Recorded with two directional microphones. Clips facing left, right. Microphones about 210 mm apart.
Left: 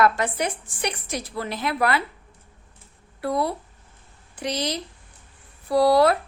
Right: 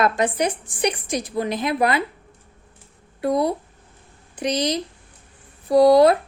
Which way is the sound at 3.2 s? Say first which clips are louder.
Right 4 dB; 20° right (ahead or behind).